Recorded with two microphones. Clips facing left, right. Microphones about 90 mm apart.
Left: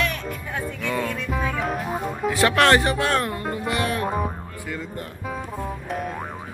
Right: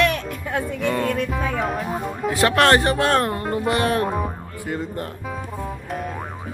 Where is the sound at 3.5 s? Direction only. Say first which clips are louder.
Right 6 dB; 45° right (ahead or behind).